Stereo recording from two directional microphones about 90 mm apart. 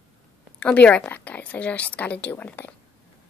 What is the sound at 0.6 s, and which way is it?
A woman's voice, 15° left (ahead or behind).